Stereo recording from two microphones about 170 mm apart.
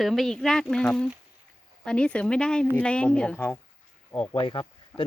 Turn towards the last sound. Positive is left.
turn(degrees=5)  # may be behind; listen again after turning